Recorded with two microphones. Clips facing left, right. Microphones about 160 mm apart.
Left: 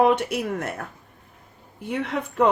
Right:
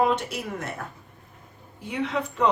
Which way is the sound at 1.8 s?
55° left (ahead or behind).